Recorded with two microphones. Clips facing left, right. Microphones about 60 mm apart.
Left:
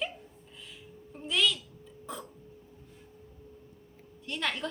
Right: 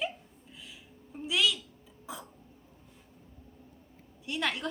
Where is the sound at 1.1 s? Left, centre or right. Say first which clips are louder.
Even; centre.